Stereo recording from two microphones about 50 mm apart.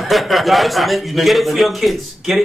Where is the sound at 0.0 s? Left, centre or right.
Centre.